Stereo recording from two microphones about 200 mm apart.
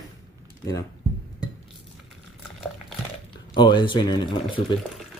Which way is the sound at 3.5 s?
20° left (ahead or behind).